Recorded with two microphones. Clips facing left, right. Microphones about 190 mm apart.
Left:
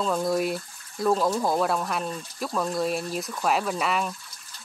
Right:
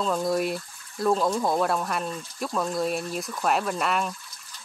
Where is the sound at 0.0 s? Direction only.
Centre (ahead or behind).